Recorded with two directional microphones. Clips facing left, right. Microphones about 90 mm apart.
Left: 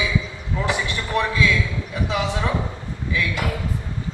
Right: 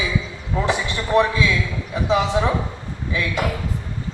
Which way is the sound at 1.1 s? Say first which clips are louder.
Right 3 dB; 25° right (ahead or behind).